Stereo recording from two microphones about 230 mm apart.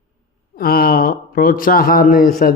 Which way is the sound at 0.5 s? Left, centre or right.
Left.